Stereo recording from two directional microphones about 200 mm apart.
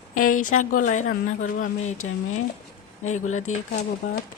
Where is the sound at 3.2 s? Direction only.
35° left (ahead or behind).